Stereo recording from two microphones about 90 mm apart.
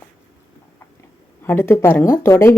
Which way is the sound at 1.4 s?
25° left (ahead or behind).